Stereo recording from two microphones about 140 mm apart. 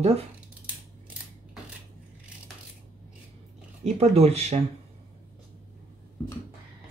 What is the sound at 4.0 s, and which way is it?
Speech, 50° right (ahead or behind).